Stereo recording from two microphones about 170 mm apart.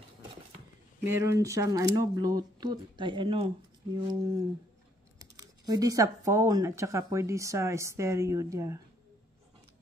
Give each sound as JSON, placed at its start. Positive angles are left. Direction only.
{"t": 1.0, "sound": "speech", "side_deg": -15}